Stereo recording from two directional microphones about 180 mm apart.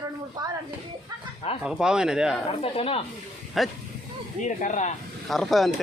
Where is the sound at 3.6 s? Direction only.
Centre (ahead or behind).